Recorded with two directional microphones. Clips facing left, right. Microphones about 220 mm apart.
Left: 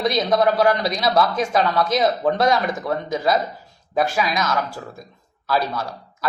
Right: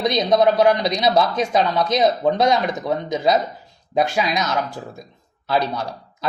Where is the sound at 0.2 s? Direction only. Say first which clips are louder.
Right 3 dB; 20° right (ahead or behind).